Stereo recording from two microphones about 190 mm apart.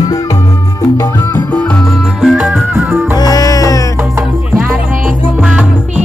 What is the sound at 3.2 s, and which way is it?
Music, 20° left (ahead or behind).